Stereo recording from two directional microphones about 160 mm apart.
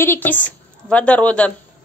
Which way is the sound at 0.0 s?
15° left (ahead or behind).